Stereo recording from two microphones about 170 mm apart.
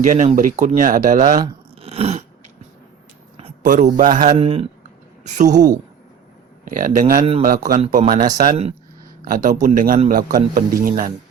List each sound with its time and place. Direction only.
0.0 s a man's voice: 50° right (ahead or behind)
1.8 s biting: 35° right (ahead or behind)
3.3 s speech: 45° right (ahead or behind)
4.4 s speech: 35° right (ahead or behind)
5.2 s a man's voice: 45° right (ahead or behind)